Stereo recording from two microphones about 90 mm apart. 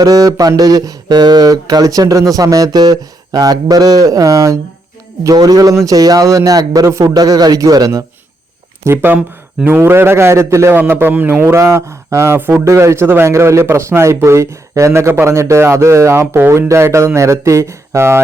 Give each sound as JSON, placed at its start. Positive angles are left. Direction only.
{"t": 0.0, "sound": "speech", "side_deg": -40}
{"t": 7.1, "sound": "speech", "side_deg": -45}
{"t": 8.8, "sound": "a man's voice", "side_deg": -25}
{"t": 11.6, "sound": "speech", "side_deg": -30}